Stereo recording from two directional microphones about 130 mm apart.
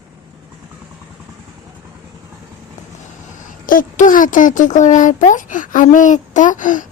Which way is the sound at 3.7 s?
90° left.